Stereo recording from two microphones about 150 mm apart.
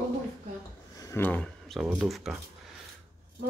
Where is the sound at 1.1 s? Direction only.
10° left (ahead or behind).